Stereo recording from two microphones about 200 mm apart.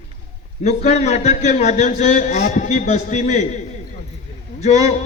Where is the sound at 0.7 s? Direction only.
35° left (ahead or behind).